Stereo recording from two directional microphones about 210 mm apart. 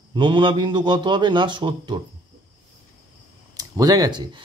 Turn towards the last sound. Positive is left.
turn(degrees=-20)  # may be behind; listen again after turning